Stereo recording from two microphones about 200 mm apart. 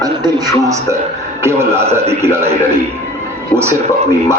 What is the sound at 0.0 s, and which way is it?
Speech, 20° right (ahead or behind).